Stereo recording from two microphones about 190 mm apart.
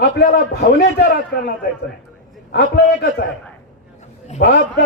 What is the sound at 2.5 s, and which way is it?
Speech, 60° left (ahead or behind).